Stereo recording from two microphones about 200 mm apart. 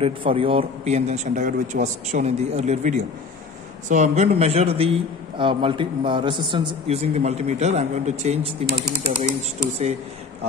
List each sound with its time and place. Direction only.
0.0 s a man's voice: 25° right (ahead or behind)